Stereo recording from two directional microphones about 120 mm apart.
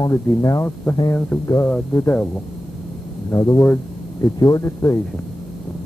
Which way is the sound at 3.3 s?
30° left (ahead or behind).